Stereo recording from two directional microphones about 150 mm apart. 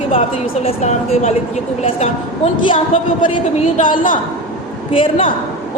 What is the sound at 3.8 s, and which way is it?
Speech, 65° left (ahead or behind).